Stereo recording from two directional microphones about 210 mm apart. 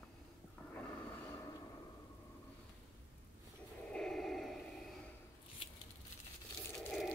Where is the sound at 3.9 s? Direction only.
Centre (ahead or behind).